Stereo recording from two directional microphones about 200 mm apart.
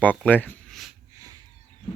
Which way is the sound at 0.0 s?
5° left (ahead or behind).